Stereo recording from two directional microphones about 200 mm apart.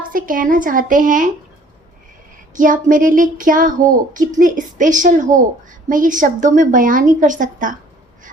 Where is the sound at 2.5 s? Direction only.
40° right (ahead or behind).